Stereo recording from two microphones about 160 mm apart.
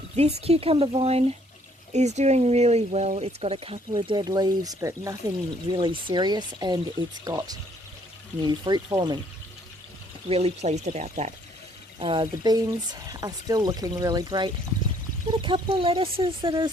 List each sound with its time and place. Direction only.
0.2 s speech: 40° right (ahead or behind)
10.2 s speech: 40° right (ahead or behind)
11.9 s speech: 30° right (ahead or behind)